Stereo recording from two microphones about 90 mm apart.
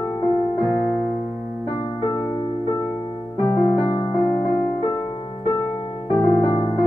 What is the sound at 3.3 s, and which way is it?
Music, 35° left (ahead or behind).